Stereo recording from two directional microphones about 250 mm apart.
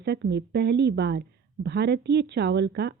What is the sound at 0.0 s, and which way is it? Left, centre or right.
Speech, right.